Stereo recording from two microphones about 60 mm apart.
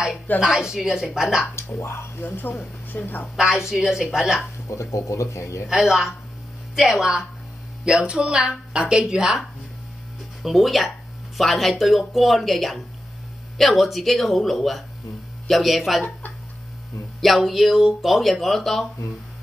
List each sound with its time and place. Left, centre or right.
0.4 s speech: centre
1.5 s speech: left
2.2 s a woman's voice: left
3.3 s speech: centre
4.9 s speech: left
5.7 s speech: centre
7.8 s speech: centre
17.2 s speech: centre